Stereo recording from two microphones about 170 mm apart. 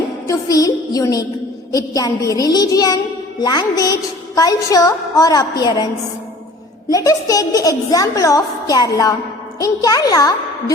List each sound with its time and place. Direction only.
0.3 s a woman's voice: 20° left (ahead or behind)
6.9 s a woman's voice: 20° left (ahead or behind)